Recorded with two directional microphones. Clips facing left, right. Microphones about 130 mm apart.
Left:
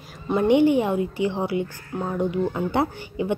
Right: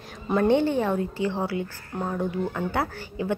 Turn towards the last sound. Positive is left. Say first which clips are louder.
# left 3 dB
turn(degrees=20)  # may be behind; listen again after turning